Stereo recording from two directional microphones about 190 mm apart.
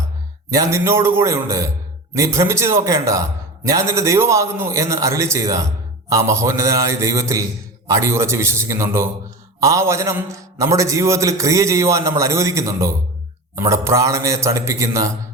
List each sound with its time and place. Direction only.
0.5 s a man's voice: 15° right (ahead or behind)